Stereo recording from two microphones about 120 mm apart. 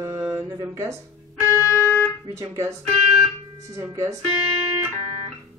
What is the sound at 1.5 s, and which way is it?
Music, 25° left (ahead or behind).